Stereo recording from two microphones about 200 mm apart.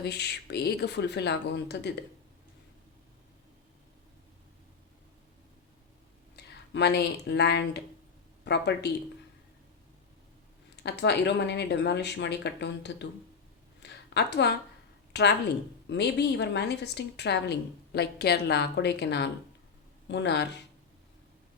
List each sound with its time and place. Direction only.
0.0 s a woman's voice: 55° left (ahead or behind)
6.3 s a woman's voice: 55° left (ahead or behind)
10.8 s a woman's voice: 55° left (ahead or behind)
13.8 s a sound: 60° left (ahead or behind)
15.1 s a woman's voice: 60° left (ahead or behind)